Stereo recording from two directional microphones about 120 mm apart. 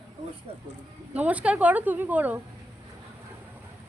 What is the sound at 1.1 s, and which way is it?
Speech, 10° right (ahead or behind).